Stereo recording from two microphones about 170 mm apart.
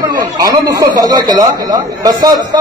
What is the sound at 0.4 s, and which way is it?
Speech, 20° right (ahead or behind).